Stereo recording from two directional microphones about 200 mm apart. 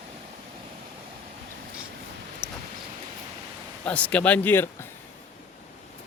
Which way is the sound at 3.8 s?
5° left (ahead or behind).